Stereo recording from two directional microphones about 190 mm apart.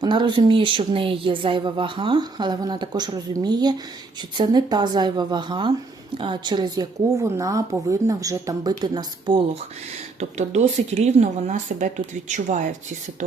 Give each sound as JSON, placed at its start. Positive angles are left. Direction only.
{"t": 0.0, "sound": "speech", "side_deg": -25}
{"t": 10.2, "sound": "speech", "side_deg": -35}